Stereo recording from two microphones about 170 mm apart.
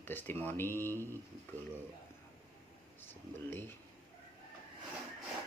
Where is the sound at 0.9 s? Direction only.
15° right (ahead or behind).